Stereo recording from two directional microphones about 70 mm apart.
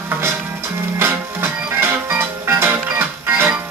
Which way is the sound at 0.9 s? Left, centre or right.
Right.